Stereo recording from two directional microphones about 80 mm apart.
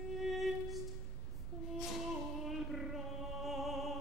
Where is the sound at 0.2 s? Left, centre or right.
Centre.